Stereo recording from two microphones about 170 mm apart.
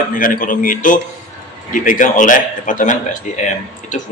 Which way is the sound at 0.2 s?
55° left (ahead or behind).